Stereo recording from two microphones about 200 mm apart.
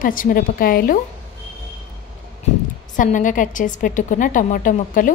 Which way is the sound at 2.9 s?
40° left (ahead or behind).